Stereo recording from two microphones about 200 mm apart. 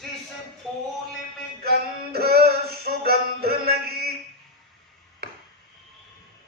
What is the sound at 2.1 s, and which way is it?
Music, 50° right (ahead or behind).